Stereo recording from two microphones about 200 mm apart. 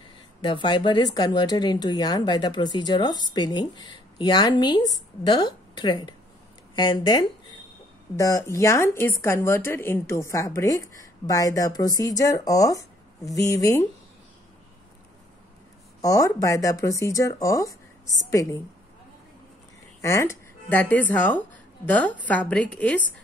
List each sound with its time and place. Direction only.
0.4 s a woman's voice: 25° left (ahead or behind)
16.0 s a woman's voice: 15° left (ahead or behind)
20.0 s a woman's voice: 15° left (ahead or behind)